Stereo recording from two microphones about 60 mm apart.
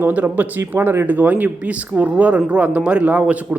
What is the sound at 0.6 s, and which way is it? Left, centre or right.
A man's voice, right.